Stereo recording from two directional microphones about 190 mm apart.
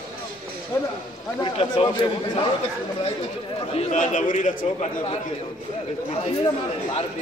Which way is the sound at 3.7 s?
35° left (ahead or behind).